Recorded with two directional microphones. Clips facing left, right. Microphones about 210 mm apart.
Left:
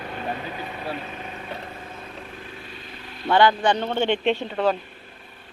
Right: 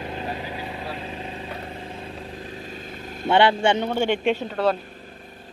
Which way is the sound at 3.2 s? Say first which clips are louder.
Even; 25° right (ahead or behind).